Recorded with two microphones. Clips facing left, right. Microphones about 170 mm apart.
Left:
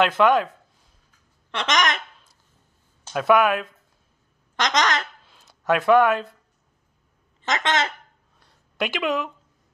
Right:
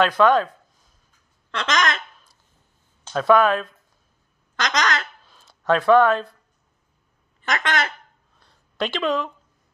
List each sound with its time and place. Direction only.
0.0 s speech: 15° left (ahead or behind)
1.5 s speech: 20° left (ahead or behind)
7.4 s speech: 20° left (ahead or behind)
8.4 s a sound: 15° left (ahead or behind)